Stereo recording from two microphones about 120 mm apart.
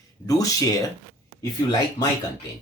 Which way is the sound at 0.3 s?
30° left (ahead or behind).